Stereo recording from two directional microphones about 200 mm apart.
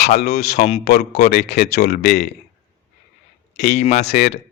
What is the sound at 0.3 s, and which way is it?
Speech, 35° left (ahead or behind).